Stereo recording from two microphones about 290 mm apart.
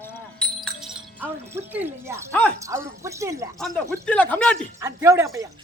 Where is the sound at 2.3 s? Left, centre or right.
Centre.